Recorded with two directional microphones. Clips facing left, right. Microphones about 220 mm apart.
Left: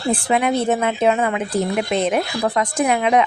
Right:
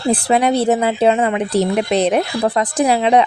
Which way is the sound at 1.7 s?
35° right (ahead or behind).